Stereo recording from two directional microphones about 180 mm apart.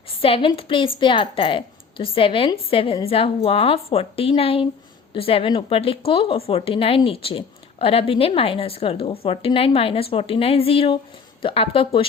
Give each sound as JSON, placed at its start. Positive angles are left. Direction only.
{"t": 0.2, "sound": "a woman's voice", "side_deg": 30}